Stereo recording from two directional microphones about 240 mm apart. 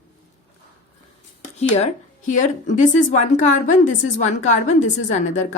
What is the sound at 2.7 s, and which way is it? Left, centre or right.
A woman's voice, left.